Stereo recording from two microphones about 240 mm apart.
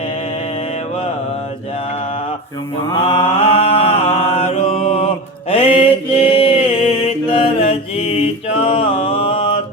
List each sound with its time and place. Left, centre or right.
3.1 s mantra: left